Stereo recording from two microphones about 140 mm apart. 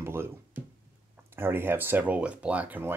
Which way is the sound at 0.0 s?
20° right (ahead or behind).